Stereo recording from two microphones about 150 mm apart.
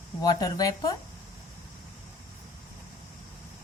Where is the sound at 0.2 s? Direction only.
25° left (ahead or behind).